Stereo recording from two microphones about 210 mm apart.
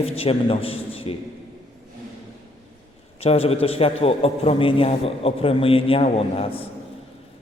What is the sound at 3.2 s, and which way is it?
A man's voice, 30° left (ahead or behind).